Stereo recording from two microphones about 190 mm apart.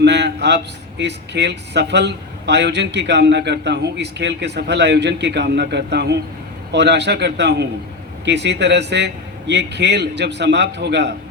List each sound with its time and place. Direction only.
0.0 s a man's voice: 60° right (ahead or behind)